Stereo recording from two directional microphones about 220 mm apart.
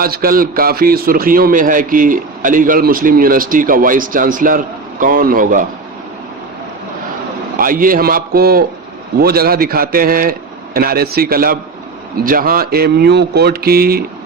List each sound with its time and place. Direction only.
0.0 s a man's voice: 40° right (ahead or behind)
7.5 s a man's voice: 40° right (ahead or behind)